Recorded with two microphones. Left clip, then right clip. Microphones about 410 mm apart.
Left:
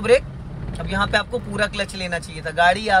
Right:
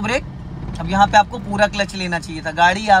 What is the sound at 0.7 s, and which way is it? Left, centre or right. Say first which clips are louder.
Speech: right 8 dB; centre.